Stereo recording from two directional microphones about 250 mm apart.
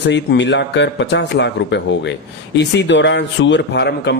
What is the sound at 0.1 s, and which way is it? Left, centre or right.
Speech, left.